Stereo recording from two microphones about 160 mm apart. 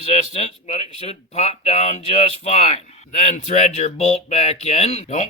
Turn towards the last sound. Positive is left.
turn(degrees=45)  # may be behind; listen again after turning